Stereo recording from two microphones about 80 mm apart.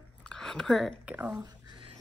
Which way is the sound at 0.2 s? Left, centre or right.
Centre.